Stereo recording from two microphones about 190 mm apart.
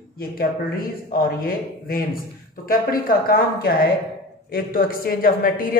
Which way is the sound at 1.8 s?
50° left (ahead or behind).